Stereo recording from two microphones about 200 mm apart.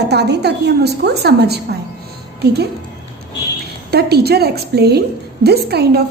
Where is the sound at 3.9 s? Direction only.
55° right (ahead or behind).